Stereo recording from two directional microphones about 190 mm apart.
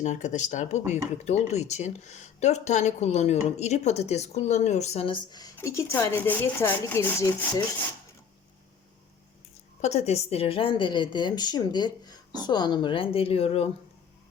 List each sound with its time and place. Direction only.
0.0 s speech: 40° left (ahead or behind); by 5.5 s 25° left (ahead or behind)
5.5 s speech: 15° left (ahead or behind)
9.8 s a woman's voice: 35° left (ahead or behind)